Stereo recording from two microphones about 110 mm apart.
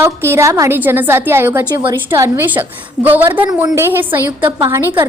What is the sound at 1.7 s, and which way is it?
Speech, 35° right (ahead or behind).